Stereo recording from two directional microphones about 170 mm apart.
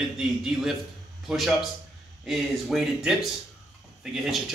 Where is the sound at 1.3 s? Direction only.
Centre (ahead or behind).